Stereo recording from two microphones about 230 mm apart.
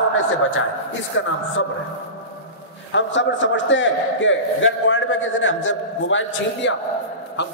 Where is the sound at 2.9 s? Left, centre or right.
Left.